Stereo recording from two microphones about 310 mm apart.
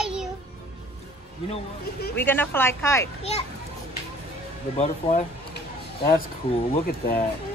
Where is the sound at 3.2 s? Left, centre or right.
Centre.